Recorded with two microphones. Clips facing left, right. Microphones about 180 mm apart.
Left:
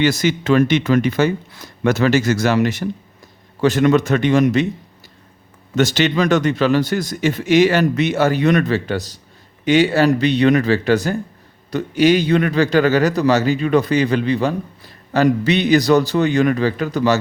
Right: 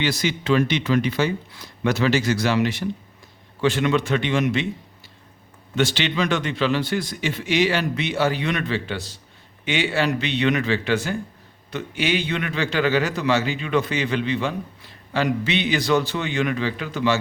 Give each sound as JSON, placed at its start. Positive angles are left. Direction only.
{"t": 0.0, "sound": "a man's voice", "side_deg": 45}
{"t": 5.7, "sound": "a man's voice", "side_deg": 45}